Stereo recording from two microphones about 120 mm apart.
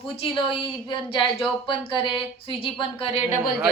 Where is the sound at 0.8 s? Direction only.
40° left (ahead or behind).